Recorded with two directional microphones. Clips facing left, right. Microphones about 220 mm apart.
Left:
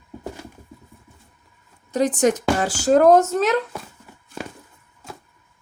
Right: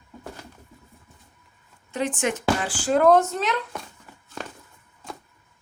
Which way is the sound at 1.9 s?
40° left (ahead or behind).